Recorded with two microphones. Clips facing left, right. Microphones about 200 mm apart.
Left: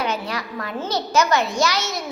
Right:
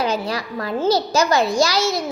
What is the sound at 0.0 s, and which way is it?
A child's voice, 35° right (ahead or behind).